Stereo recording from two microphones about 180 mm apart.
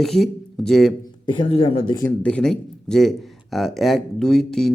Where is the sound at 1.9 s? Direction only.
10° left (ahead or behind).